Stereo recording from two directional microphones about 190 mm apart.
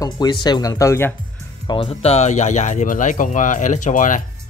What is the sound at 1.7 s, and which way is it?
Speech, 30° left (ahead or behind).